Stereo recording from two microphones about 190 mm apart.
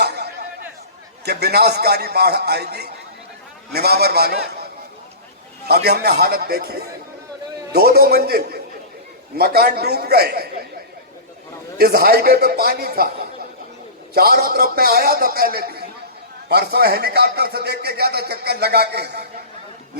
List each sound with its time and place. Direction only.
0.0 s a sound: 60° right (ahead or behind)
1.2 s a man's voice: 60° right (ahead or behind)
5.6 s a man's voice: 55° right (ahead or behind)
11.8 s a man's voice: 55° right (ahead or behind)